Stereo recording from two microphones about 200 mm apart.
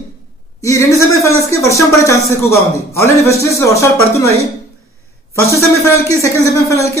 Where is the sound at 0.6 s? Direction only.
15° left (ahead or behind).